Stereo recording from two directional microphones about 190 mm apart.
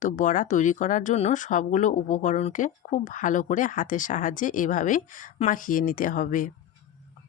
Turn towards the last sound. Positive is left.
turn(degrees=45)  # may be behind; listen again after turning